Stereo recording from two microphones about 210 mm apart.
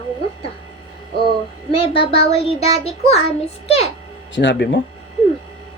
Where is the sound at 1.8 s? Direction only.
25° left (ahead or behind).